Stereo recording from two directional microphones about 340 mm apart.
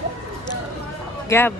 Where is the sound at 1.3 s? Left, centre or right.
Centre.